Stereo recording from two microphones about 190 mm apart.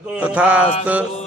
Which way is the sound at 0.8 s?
5° right (ahead or behind).